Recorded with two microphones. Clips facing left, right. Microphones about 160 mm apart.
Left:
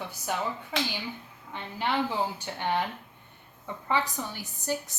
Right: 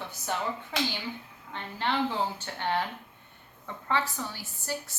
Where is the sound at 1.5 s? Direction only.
15° left (ahead or behind).